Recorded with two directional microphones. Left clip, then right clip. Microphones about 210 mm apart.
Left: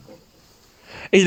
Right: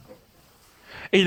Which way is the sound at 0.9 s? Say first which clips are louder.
Left 4 dB; 20° left (ahead or behind).